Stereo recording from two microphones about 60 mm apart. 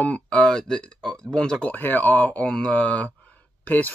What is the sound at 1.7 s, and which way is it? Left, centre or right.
Speech, left.